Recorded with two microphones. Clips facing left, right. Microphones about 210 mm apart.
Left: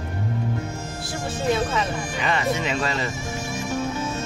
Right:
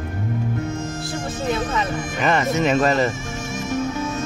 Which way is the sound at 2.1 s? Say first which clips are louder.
Right 5 dB; 45° right (ahead or behind).